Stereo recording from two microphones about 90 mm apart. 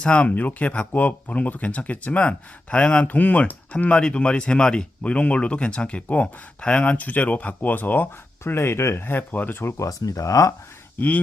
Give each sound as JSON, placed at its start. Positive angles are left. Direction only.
{"t": 0.0, "sound": "speech", "side_deg": 10}
{"t": 10.9, "sound": "speech", "side_deg": 15}